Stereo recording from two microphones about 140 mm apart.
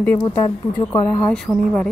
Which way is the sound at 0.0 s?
15° left (ahead or behind).